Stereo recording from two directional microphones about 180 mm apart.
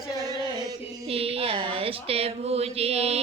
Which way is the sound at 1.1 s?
30° right (ahead or behind).